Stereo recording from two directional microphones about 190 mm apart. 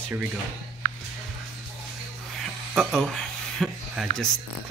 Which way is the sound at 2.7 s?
Centre (ahead or behind).